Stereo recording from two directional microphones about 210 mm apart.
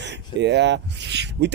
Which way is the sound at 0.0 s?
55° right (ahead or behind).